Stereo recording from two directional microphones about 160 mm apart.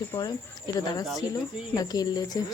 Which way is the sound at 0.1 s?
20° left (ahead or behind).